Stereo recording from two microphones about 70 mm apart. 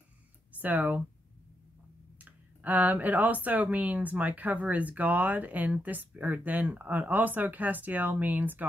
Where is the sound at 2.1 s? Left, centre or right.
Right.